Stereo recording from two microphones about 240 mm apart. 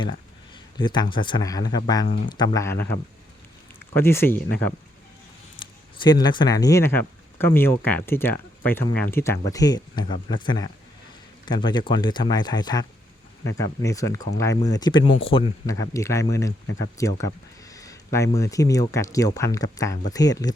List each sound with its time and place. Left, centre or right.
0.8 s speech: centre
5.5 s speech: centre